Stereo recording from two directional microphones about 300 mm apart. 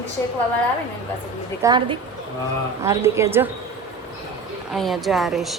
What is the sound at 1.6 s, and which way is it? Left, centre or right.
Speech, centre.